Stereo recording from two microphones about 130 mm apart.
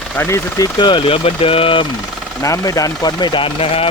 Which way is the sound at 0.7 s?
35° left (ahead or behind).